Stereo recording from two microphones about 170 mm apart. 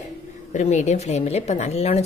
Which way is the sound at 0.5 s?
45° left (ahead or behind).